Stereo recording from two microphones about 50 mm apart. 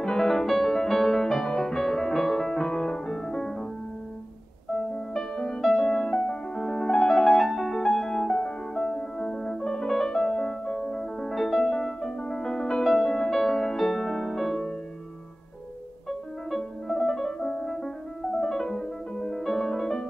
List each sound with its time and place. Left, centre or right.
0.0 s music: centre
4.9 s music: centre
16.1 s music: centre